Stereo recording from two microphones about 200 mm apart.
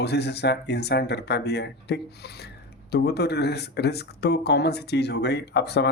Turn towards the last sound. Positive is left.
turn(degrees=55)  # may be behind; listen again after turning